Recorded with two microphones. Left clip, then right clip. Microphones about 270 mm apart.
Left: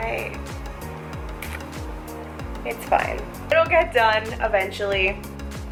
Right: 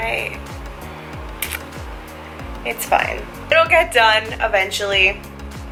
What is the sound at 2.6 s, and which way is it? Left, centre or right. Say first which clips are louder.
Speech: right 4 dB; centre.